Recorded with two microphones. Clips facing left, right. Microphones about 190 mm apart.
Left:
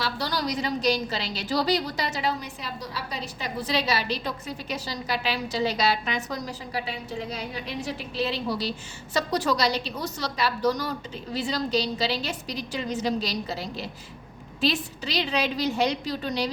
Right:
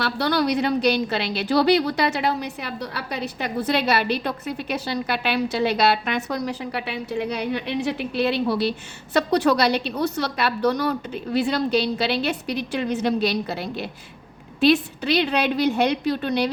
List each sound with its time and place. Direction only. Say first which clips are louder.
0.0 s a woman's voice: right 7 dB; 60° right (ahead or behind)